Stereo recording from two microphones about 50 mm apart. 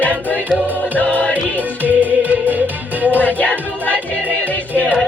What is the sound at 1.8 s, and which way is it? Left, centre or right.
Music, right.